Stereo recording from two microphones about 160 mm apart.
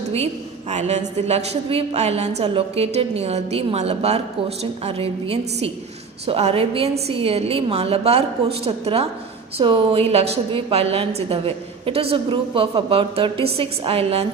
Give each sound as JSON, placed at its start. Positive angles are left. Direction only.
{"t": 0.7, "sound": "a woman's voice", "side_deg": -45}